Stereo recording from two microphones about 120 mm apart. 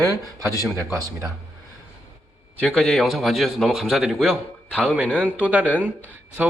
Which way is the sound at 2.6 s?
5° left (ahead or behind).